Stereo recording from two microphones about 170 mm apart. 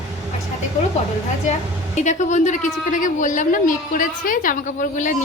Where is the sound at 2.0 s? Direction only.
45° left (ahead or behind).